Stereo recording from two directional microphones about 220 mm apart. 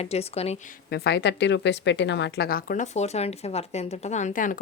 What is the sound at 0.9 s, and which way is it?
Speech, 45° left (ahead or behind).